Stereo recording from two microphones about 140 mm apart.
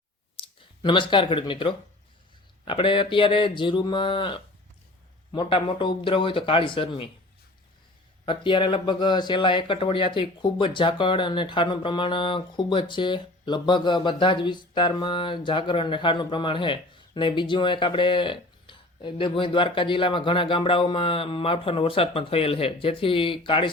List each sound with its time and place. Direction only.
0.3 s speech: 35° left (ahead or behind)
8.2 s speech: 35° left (ahead or behind)